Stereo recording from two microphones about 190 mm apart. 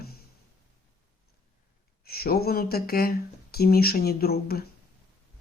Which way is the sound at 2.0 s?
55° left (ahead or behind).